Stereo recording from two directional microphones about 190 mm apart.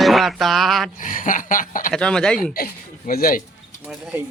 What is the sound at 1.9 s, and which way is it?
Speech, 5° left (ahead or behind).